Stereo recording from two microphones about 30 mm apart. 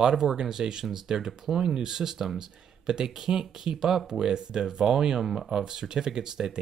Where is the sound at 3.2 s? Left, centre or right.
Right.